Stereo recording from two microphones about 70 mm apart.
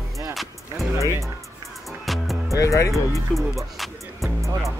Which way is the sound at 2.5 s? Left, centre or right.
Left.